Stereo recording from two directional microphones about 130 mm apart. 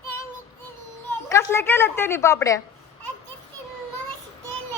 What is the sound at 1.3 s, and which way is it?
A woman's voice, 20° left (ahead or behind).